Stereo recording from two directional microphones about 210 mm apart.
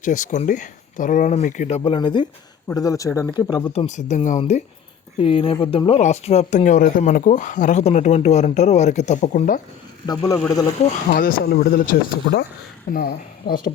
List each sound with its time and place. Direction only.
0.0 s speech: 35° left (ahead or behind)
10.1 s speech: 15° left (ahead or behind)
11.1 s speech: 45° left (ahead or behind)